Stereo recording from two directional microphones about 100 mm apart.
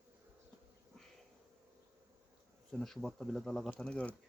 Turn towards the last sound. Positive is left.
turn(degrees=10)  # may be behind; listen again after turning